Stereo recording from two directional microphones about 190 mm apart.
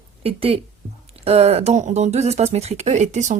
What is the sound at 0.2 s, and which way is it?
A woman's voice, 30° right (ahead or behind).